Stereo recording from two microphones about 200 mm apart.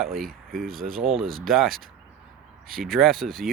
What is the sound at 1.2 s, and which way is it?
Speech, 45° right (ahead or behind).